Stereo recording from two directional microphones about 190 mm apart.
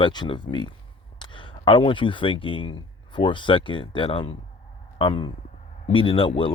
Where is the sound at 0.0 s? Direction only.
25° left (ahead or behind).